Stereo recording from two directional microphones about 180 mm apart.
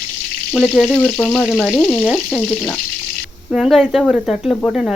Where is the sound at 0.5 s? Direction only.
Centre (ahead or behind).